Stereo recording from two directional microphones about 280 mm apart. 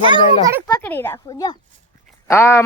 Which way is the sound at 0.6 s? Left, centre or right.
Centre.